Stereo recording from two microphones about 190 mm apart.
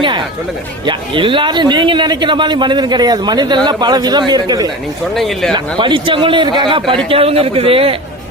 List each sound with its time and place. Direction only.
0.9 s a man's voice: 25° right (ahead or behind)
5.1 s speech: centre (ahead or behind)
5.5 s a man's voice: 25° right (ahead or behind)